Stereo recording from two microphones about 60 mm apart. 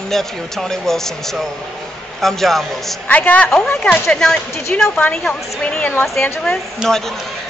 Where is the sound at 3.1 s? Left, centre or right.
Left.